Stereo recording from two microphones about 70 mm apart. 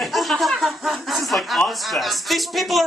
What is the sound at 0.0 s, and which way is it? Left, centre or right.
Speech, centre.